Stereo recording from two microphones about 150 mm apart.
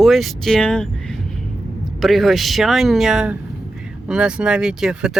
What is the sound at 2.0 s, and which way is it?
Speech, centre (ahead or behind).